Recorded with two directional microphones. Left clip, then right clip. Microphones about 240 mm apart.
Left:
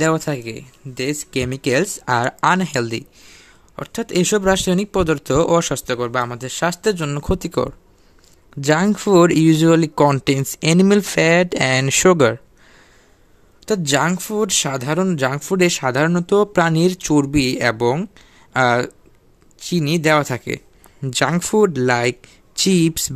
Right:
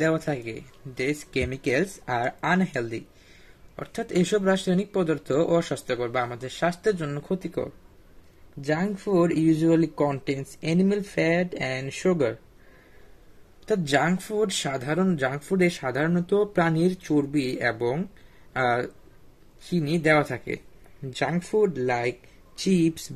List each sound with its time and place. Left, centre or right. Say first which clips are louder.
0.0 s speech: left 6 dB; left
13.7 s speech: left 5 dB; left